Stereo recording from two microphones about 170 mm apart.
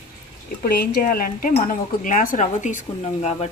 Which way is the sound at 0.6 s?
60° left (ahead or behind).